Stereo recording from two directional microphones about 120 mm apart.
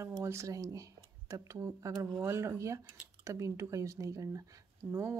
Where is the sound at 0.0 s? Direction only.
25° right (ahead or behind).